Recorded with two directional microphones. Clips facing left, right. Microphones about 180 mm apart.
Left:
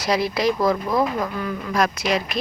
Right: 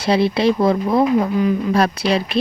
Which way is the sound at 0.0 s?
30° right (ahead or behind).